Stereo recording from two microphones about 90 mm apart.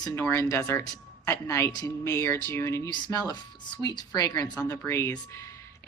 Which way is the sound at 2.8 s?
55° left (ahead or behind).